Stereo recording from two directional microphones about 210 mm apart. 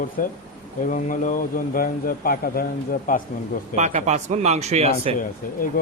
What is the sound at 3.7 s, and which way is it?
Speech, 35° right (ahead or behind).